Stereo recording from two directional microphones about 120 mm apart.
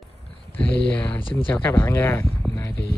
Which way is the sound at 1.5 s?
15° left (ahead or behind).